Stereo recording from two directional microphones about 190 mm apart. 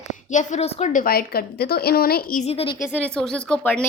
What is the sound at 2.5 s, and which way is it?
Speech, 30° left (ahead or behind).